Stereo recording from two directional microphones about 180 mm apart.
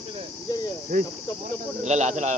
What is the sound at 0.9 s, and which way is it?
Speech, 50° right (ahead or behind).